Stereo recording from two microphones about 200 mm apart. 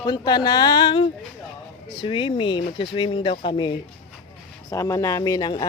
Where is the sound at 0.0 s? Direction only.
20° left (ahead or behind).